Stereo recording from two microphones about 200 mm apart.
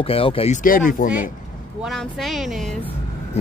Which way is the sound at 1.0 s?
40° left (ahead or behind).